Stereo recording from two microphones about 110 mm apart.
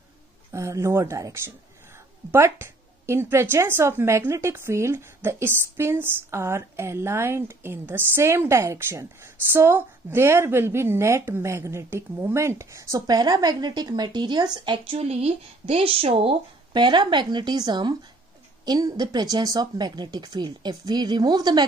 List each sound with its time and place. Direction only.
0.5 s a woman's voice: 25° right (ahead or behind); by 14.8 s 45° right (ahead or behind)
14.9 s speech: 70° right (ahead or behind); by 21.6 s 40° right (ahead or behind)